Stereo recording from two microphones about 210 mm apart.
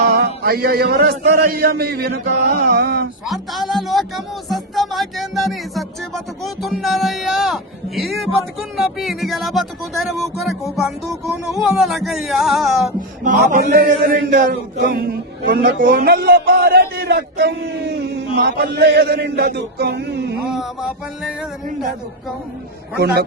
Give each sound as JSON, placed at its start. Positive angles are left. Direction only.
{"t": 0.0, "sound": "mantra", "side_deg": -50}
{"t": 1.3, "sound": "a man's voice", "side_deg": -45}
{"t": 3.2, "sound": "music", "side_deg": 0}
{"t": 8.7, "sound": "speech", "side_deg": 0}
{"t": 13.2, "sound": "a man's voice", "side_deg": -45}
{"t": 20.4, "sound": "speech", "side_deg": 0}
{"t": 23.0, "sound": "a man's voice", "side_deg": -50}